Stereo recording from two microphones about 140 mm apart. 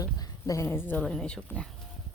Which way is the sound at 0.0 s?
25° left (ahead or behind).